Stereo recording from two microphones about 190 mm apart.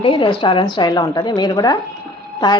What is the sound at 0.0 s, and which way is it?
A woman's voice, 25° left (ahead or behind).